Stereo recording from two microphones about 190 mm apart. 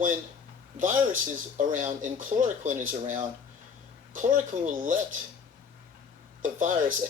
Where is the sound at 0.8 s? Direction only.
45° right (ahead or behind).